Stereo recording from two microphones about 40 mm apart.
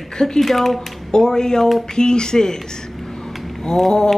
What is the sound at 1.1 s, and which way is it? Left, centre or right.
Speech, centre.